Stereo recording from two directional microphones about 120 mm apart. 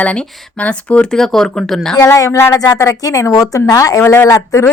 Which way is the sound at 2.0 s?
25° left (ahead or behind).